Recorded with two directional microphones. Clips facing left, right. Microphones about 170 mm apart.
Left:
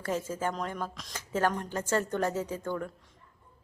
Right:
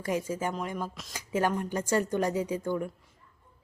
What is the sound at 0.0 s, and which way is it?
Music, 10° right (ahead or behind).